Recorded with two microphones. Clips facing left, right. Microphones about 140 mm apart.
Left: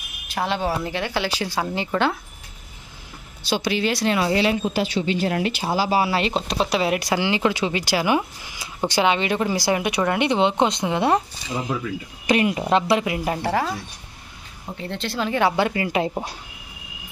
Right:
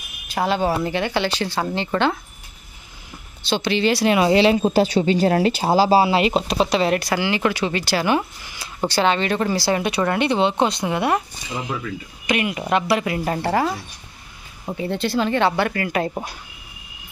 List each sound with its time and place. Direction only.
0.3 s speech: centre (ahead or behind)
3.4 s speech: 10° left (ahead or behind)
4.1 s speech: 20° right (ahead or behind)
4.6 s speech: 35° right (ahead or behind)
6.2 s speech: 5° right (ahead or behind)
7.0 s speech: 20° left (ahead or behind)
12.3 s speech: 30° left (ahead or behind); by 13.5 s 10° left (ahead or behind)
13.5 s speech: 5° right (ahead or behind)
14.8 s speech: 5° right (ahead or behind)
15.5 s speech: 15° left (ahead or behind)